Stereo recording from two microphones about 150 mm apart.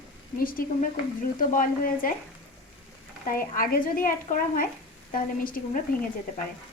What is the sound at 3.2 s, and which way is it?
Speech, 70° left (ahead or behind).